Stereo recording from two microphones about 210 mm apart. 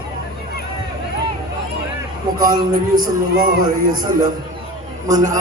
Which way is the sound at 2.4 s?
40° right (ahead or behind).